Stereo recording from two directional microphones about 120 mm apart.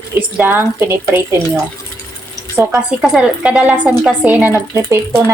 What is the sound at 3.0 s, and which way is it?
A woman's voice, 10° right (ahead or behind).